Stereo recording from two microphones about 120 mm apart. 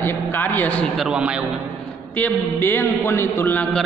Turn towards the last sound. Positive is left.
turn(degrees=15)  # may be behind; listen again after turning